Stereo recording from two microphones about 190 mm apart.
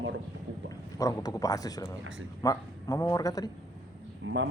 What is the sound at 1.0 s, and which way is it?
Speech, 20° left (ahead or behind).